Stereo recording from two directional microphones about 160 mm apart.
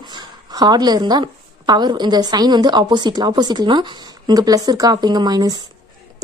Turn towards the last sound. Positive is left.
turn(degrees=-25)  # may be behind; listen again after turning